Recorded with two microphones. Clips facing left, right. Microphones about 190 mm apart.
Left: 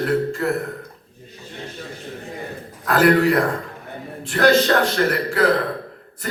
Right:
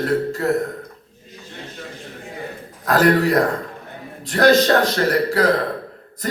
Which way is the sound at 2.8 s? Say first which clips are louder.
Even; 40° right (ahead or behind).